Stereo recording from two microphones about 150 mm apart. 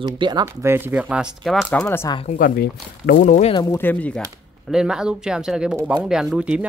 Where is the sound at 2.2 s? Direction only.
70° left (ahead or behind).